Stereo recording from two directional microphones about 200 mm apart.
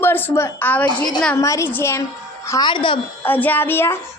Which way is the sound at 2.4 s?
15° left (ahead or behind).